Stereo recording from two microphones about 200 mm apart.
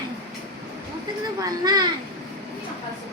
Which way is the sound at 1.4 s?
20° right (ahead or behind).